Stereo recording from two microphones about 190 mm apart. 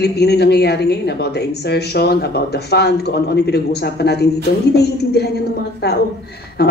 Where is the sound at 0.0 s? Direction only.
60° left (ahead or behind).